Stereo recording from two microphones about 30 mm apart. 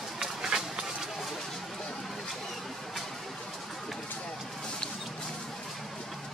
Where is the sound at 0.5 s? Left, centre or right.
Centre.